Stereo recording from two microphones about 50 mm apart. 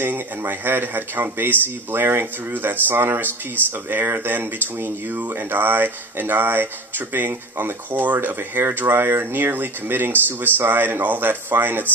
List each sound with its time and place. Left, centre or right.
0.0 s speech: right